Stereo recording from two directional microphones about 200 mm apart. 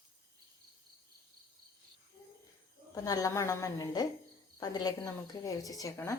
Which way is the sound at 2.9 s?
20° left (ahead or behind).